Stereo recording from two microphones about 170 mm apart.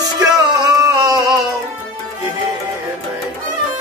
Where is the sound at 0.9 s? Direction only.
20° right (ahead or behind).